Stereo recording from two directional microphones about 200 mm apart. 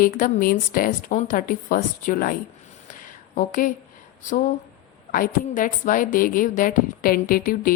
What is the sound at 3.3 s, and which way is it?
A woman's voice, 45° left (ahead or behind).